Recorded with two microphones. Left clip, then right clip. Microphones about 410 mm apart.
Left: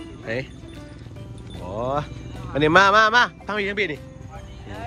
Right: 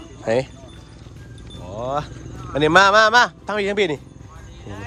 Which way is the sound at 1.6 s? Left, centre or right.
Centre.